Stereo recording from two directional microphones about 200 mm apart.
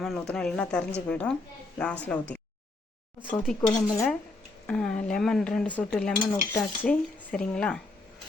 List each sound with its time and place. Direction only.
0.0 s cutlery: 5° left (ahead or behind)
1.0 s a woman's voice: 5° left (ahead or behind)
3.2 s cutlery: centre (ahead or behind)
3.7 s dishes: 20° left (ahead or behind)
4.6 s cutlery: 5° left (ahead or behind)